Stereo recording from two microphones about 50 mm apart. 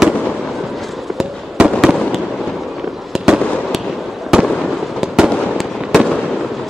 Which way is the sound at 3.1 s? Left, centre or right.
Centre.